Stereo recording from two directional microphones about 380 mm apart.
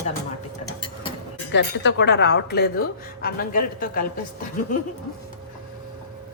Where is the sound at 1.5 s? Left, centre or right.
Left.